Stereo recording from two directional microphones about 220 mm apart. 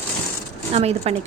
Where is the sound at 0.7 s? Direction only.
30° right (ahead or behind).